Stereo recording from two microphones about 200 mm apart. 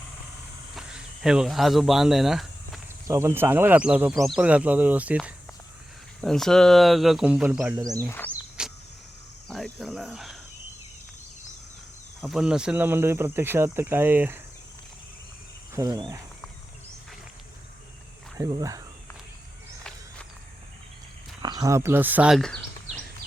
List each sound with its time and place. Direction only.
0.8 s a sound: 5° right (ahead or behind)
3.1 s speech: 15° right (ahead or behind)
8.0 s speech: 10° left (ahead or behind)
8.3 s cricket: 5° right (ahead or behind)
9.5 s speech: centre (ahead or behind)
12.2 s speech: centre (ahead or behind)
15.7 s speech: 20° right (ahead or behind)
18.3 s speech: 15° right (ahead or behind)
21.4 s speech: 15° right (ahead or behind); by 22.6 s 5° left (ahead or behind)